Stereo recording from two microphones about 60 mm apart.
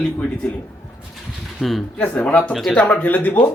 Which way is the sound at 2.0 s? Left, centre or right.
Left.